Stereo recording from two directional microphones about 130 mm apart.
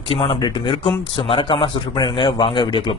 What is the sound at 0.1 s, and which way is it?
Speech, 40° left (ahead or behind).